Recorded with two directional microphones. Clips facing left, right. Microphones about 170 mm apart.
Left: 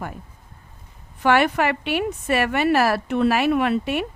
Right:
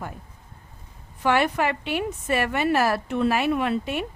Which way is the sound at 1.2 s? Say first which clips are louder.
Left 3 dB; 70° left (ahead or behind).